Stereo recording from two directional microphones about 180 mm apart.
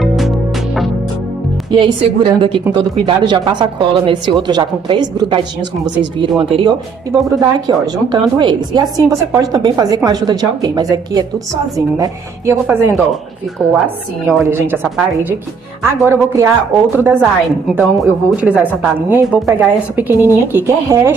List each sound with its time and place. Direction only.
0.0 s music: centre (ahead or behind)
1.7 s a woman's voice: 25° right (ahead or behind)
16.1 s a woman's voice: 15° right (ahead or behind)